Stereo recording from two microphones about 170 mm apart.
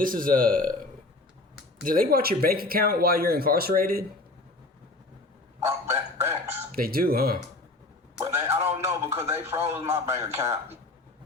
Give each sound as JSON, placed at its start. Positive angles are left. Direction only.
{"t": 0.0, "sound": "speech", "side_deg": -55}
{"t": 1.8, "sound": "speech", "side_deg": -55}
{"t": 5.6, "sound": "speech", "side_deg": -15}
{"t": 6.7, "sound": "speech", "side_deg": -60}
{"t": 8.2, "sound": "speech", "side_deg": -15}